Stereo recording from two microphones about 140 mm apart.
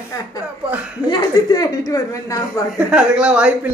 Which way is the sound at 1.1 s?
30° left (ahead or behind).